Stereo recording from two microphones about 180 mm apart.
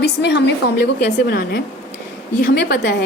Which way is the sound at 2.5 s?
70° left (ahead or behind).